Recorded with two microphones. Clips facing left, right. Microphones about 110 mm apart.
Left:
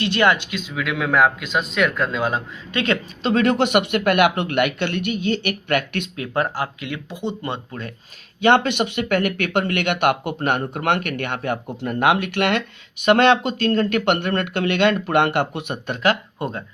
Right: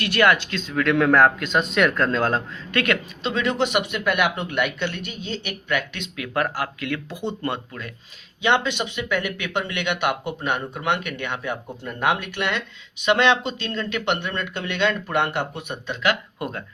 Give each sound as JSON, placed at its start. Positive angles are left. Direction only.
{"t": 0.0, "sound": "speech", "side_deg": 25}
{"t": 3.2, "sound": "speech", "side_deg": 50}
{"t": 6.1, "sound": "speech", "side_deg": 25}
{"t": 7.7, "sound": "speech", "side_deg": 35}
{"t": 8.4, "sound": "speech", "side_deg": 50}
{"t": 16.0, "sound": "speech", "side_deg": 30}